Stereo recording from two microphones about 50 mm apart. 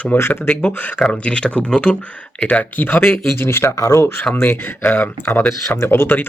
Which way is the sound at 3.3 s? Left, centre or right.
Left.